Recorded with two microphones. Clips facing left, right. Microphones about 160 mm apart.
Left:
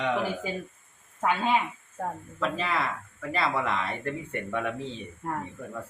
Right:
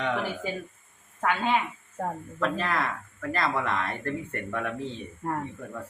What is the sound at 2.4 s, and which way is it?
Speech, 5° left (ahead or behind).